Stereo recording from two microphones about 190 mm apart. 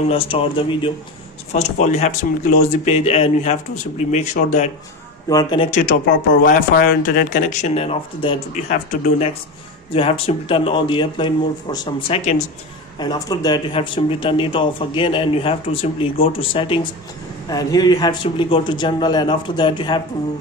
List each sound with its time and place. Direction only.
0.1 s speech: 30° left (ahead or behind)
1.5 s speech: 35° left (ahead or behind)
5.3 s speech: 25° left (ahead or behind)
5.7 s speech: 45° left (ahead or behind)
9.9 s speech: 30° left (ahead or behind)